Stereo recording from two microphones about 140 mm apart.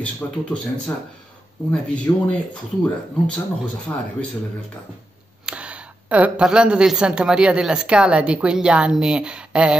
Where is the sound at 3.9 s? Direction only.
10° left (ahead or behind).